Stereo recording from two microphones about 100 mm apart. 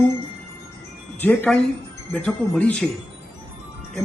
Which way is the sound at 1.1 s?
15° left (ahead or behind).